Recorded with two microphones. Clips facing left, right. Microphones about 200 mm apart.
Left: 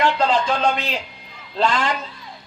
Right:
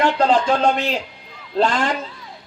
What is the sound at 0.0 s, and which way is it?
A woman's voice, 45° right (ahead or behind).